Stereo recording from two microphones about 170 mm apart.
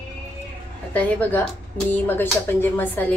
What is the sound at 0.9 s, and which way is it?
A woman's voice, 10° left (ahead or behind).